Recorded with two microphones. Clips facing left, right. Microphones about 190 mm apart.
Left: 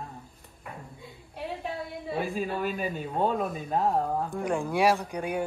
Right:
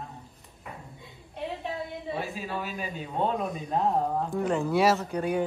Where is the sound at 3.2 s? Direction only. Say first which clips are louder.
Left 1 dB; centre (ahead or behind).